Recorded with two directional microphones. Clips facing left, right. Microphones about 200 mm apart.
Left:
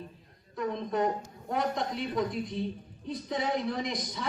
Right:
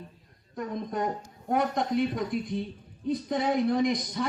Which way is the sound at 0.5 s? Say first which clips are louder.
Left 1 dB; 50° right (ahead or behind).